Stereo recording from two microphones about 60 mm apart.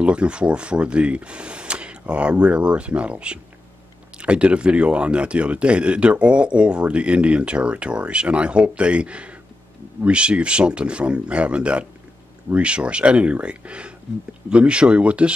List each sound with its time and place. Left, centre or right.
0.0 s speech: centre